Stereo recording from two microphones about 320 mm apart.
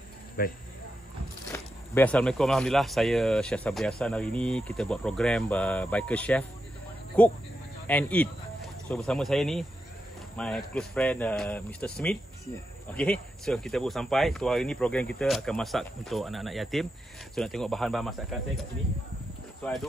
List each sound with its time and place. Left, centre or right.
0.4 s speech: left
1.5 s speech: centre